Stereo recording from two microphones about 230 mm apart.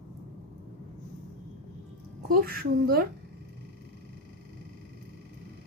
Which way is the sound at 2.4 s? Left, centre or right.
Right.